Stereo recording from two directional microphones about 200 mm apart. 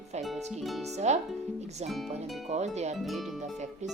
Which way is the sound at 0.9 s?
35° right (ahead or behind).